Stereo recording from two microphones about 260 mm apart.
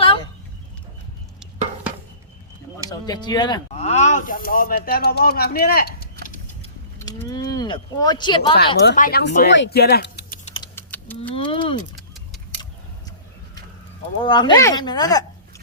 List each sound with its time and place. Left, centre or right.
2.9 s speech: centre; by 6.1 s left
6.2 s mechanisms: left
7.0 s speech: centre
8.5 s speech: left
10.5 s typing: centre
11.3 s speech: centre
14.2 s speech: centre